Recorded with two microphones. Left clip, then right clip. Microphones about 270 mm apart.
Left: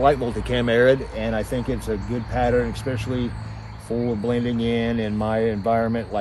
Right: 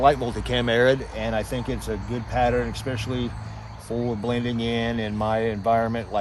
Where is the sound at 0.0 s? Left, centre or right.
Right.